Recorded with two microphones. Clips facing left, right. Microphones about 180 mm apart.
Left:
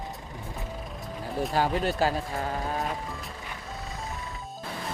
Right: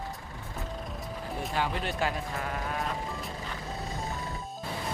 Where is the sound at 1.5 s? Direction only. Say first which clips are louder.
Left 5 dB; 40° left (ahead or behind).